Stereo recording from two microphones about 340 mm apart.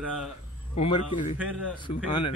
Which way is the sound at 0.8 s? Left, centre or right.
Centre.